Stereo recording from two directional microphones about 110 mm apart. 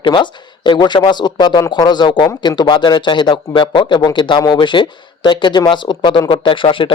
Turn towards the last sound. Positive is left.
turn(degrees=50)  # may be behind; listen again after turning